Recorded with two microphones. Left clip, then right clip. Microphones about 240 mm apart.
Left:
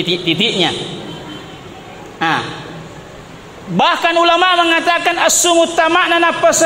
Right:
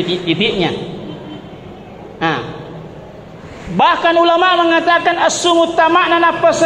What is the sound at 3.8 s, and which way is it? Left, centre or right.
A man's voice, left.